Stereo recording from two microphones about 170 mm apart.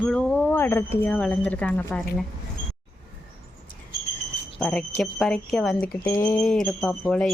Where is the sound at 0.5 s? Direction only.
15° left (ahead or behind).